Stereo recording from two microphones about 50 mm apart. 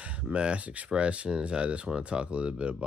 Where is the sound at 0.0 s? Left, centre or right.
Right.